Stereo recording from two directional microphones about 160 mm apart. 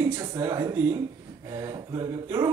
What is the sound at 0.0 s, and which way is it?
Speech, 20° right (ahead or behind).